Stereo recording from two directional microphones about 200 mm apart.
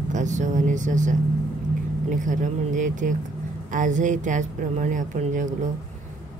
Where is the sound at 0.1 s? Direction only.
35° right (ahead or behind).